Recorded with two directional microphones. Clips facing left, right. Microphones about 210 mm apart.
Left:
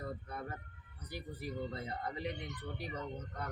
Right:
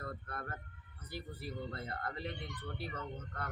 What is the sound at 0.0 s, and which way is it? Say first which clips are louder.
Vehicle: left 2 dB; 15° left (ahead or behind).